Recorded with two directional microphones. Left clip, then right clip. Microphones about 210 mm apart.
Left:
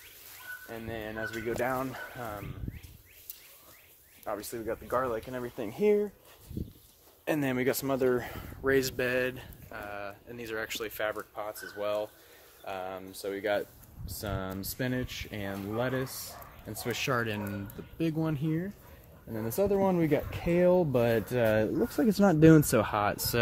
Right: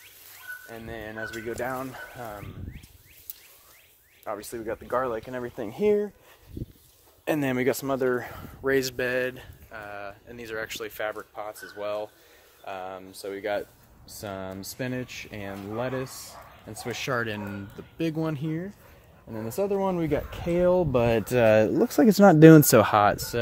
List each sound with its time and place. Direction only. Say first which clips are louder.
0.7 s speech: left 2 dB; 20° right (ahead or behind)
1.6 s speech: left 1 dB; centre (ahead or behind)
4.2 s speech: right 2 dB; 35° right (ahead or behind)
7.2 s speech: right 4 dB; 40° right (ahead or behind)
7.8 s speech: right 2 dB; 20° right (ahead or behind)
8.6 s speech: right 3 dB; 25° right (ahead or behind)
17.9 s speech: right 3 dB; 30° right (ahead or behind); by 20.9 s 15° right (ahead or behind)
20.9 s speech: right 4 dB; 40° right (ahead or behind)
23.3 s speech: right 1 dB; 15° left (ahead or behind)